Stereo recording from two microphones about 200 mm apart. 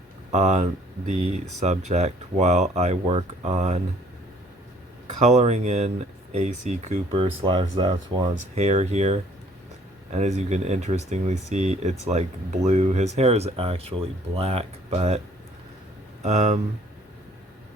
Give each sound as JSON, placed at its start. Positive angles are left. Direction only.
{"t": 0.3, "sound": "speech", "side_deg": -35}
{"t": 5.2, "sound": "speech", "side_deg": -35}
{"t": 16.2, "sound": "speech", "side_deg": -35}